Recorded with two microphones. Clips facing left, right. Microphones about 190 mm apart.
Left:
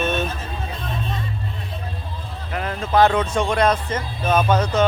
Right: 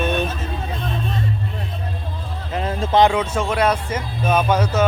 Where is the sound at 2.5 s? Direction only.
25° right (ahead or behind).